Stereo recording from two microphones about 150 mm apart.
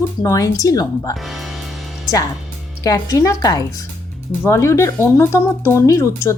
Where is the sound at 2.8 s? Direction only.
25° left (ahead or behind).